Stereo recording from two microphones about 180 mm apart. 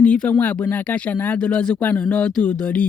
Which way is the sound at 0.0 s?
5° left (ahead or behind).